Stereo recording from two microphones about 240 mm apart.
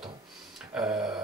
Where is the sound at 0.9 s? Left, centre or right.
Centre.